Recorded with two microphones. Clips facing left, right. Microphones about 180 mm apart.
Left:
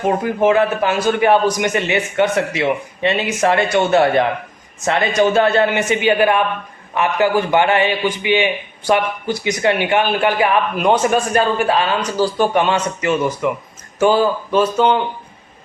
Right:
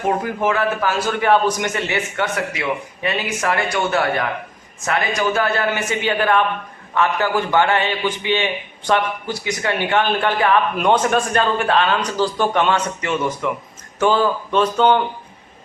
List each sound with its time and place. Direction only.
0.4 s a man's voice: 20° left (ahead or behind); by 15.0 s 5° left (ahead or behind)